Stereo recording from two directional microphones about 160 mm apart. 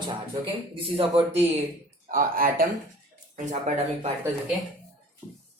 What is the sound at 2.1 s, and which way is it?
Speech, 60° right (ahead or behind).